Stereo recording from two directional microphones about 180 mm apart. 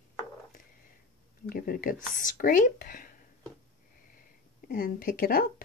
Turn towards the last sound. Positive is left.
turn(degrees=50)  # may be behind; listen again after turning